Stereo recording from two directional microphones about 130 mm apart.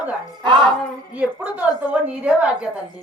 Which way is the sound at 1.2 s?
10° right (ahead or behind).